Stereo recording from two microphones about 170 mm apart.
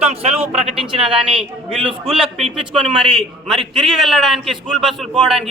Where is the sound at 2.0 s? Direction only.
Centre (ahead or behind).